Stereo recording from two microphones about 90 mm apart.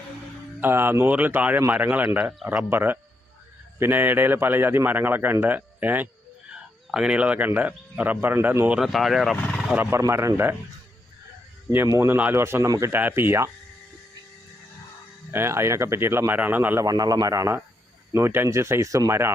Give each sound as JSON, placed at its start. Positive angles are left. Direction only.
{"t": 0.6, "sound": "a man's voice", "side_deg": -25}
{"t": 2.6, "sound": "a man's voice", "side_deg": -25}
{"t": 6.5, "sound": "speech", "side_deg": -10}
{"t": 8.8, "sound": "speech", "side_deg": 0}
{"t": 9.7, "sound": "a man's voice", "side_deg": -25}
{"t": 11.9, "sound": "a man's voice", "side_deg": -25}
{"t": 12.6, "sound": "speech", "side_deg": -40}
{"t": 12.9, "sound": "a man's voice", "side_deg": -25}
{"t": 15.3, "sound": "a man's voice", "side_deg": -30}
{"t": 16.8, "sound": "speech", "side_deg": -45}